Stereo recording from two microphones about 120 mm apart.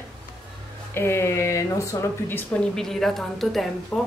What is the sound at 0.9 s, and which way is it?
Speech, 20° left (ahead or behind).